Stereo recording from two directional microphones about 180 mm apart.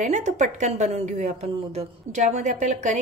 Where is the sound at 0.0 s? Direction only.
40° right (ahead or behind).